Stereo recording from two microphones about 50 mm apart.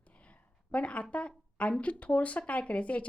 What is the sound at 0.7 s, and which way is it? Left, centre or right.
A woman's voice, left.